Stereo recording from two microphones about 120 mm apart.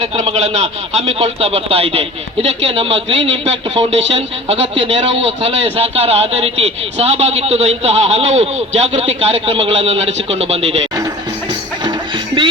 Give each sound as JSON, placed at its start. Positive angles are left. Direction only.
{"t": 0.0, "sound": "a man's voice", "side_deg": -65}
{"t": 11.8, "sound": "music", "side_deg": -40}